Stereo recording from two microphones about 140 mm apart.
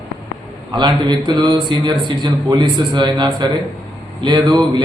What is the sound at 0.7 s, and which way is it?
A man's voice, 30° right (ahead or behind).